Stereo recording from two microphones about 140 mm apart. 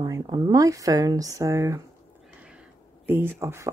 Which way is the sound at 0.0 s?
30° right (ahead or behind).